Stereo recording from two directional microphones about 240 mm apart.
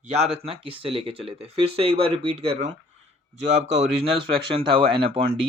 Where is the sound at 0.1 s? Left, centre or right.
Right.